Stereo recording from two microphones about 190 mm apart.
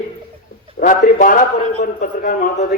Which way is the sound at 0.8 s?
45° left (ahead or behind).